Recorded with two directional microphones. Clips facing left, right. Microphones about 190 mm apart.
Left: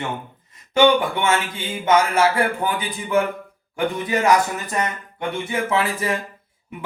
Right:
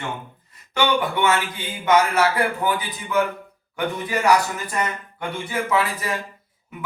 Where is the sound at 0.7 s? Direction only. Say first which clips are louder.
Left 5 dB; 25° left (ahead or behind).